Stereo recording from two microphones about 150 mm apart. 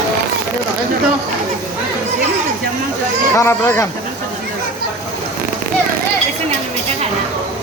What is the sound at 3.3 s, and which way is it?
Speech, 15° left (ahead or behind).